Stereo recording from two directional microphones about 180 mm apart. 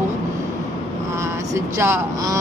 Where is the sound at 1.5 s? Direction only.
15° right (ahead or behind).